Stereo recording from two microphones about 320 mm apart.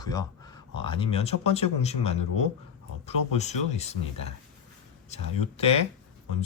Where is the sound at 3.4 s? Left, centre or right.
Left.